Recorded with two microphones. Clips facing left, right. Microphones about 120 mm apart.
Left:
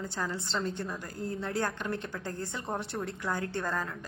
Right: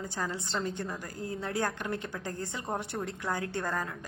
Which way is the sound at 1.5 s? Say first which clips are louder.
Right 1 dB; 15° right (ahead or behind).